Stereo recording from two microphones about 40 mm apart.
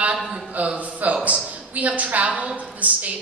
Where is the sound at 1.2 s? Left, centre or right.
Right.